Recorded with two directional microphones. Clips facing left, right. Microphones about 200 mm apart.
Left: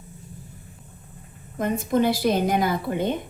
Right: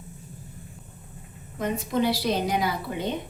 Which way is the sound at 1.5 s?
50° left (ahead or behind).